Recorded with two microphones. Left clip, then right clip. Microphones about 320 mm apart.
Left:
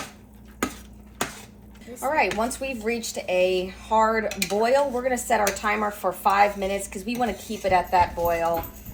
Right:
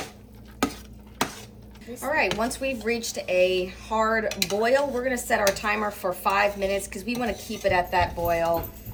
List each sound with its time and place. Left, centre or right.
2.0 s speech: centre